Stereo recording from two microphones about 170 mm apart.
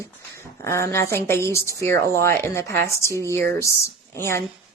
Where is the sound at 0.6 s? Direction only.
15° left (ahead or behind).